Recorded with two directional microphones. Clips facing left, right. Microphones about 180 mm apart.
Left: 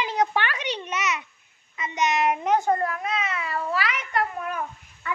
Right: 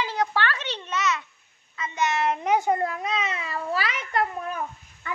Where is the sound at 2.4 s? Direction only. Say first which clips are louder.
Even; 10° right (ahead or behind); by 4.2 s 30° right (ahead or behind).